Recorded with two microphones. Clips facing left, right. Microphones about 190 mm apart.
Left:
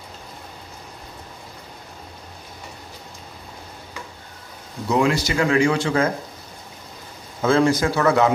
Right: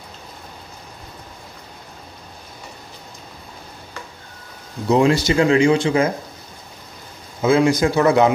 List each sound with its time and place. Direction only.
4.8 s speech: 25° right (ahead or behind)
7.4 s a man's voice: 15° right (ahead or behind)